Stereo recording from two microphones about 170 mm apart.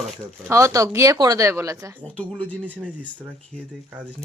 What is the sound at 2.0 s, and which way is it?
Speech, 10° left (ahead or behind).